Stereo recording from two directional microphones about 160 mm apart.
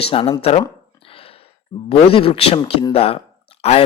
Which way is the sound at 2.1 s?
35° left (ahead or behind).